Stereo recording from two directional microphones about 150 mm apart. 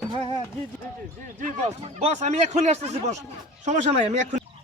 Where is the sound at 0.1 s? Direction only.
35° right (ahead or behind).